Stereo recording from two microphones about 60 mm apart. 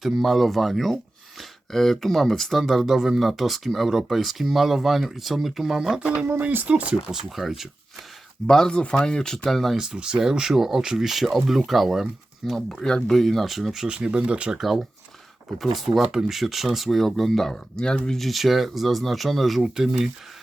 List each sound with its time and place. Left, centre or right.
0.0 s speech: centre
6.1 s speech: right
6.9 s speech: centre
8.4 s speech: centre
9.7 s speech: centre
14.5 s speech: centre
18.3 s speech: centre